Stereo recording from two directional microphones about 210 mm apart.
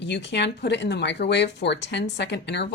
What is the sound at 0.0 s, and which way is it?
Speech, 55° left (ahead or behind).